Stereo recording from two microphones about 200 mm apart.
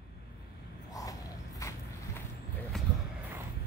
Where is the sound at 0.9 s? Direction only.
15° left (ahead or behind).